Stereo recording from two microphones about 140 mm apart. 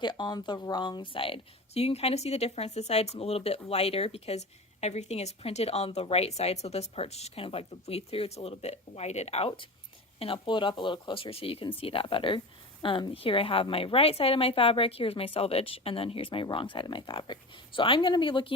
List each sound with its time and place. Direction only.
0.0 s a woman's voice: 35° left (ahead or behind); by 9.5 s 50° left (ahead or behind)
10.2 s a woman's voice: 40° left (ahead or behind)